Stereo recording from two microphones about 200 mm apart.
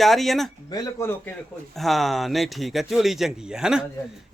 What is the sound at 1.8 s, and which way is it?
Speech, centre (ahead or behind).